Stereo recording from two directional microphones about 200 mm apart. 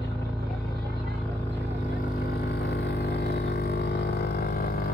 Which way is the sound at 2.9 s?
60° left (ahead or behind).